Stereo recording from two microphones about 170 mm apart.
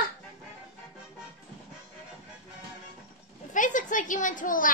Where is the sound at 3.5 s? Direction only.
50° left (ahead or behind).